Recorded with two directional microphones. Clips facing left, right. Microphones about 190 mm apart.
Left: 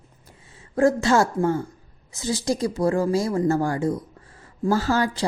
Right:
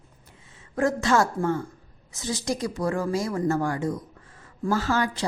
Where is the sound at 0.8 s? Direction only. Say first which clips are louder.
Left 4 dB; 30° left (ahead or behind).